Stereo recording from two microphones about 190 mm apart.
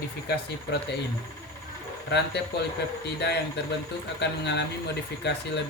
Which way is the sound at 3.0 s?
65° left (ahead or behind).